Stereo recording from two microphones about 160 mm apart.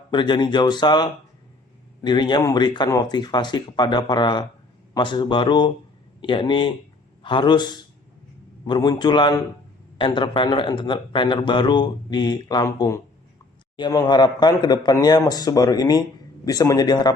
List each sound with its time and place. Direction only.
0.1 s a man's voice: 30° left (ahead or behind)